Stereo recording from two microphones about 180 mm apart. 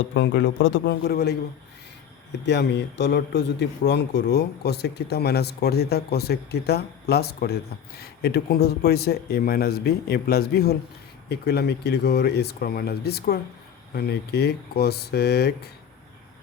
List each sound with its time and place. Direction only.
0.1 s a man's voice: 90° left; by 1.4 s 65° left (ahead or behind)
2.5 s a man's voice: 70° left (ahead or behind)